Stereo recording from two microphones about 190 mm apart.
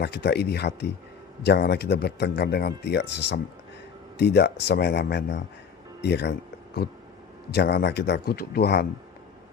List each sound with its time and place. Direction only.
0.0 s speech: 60° left (ahead or behind)